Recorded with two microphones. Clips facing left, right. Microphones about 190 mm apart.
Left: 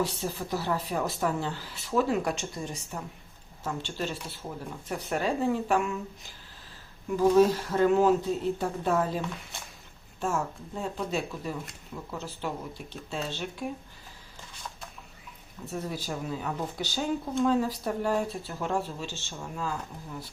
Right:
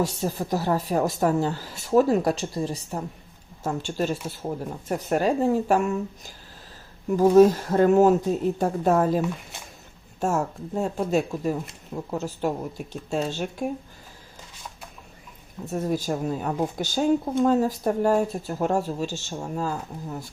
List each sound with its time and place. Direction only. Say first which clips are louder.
0.0 s speech: right 5 dB; 45° right (ahead or behind)
15.7 s speech: right 8 dB; 45° right (ahead or behind)